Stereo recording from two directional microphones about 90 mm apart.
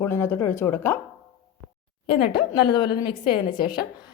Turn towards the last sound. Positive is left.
turn(degrees=55)  # may be behind; listen again after turning